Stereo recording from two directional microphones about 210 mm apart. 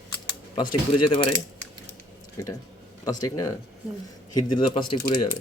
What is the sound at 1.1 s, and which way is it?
Speech, 25° left (ahead or behind).